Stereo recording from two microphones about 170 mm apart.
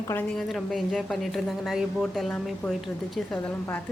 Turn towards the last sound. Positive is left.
turn(degrees=10)  # may be behind; listen again after turning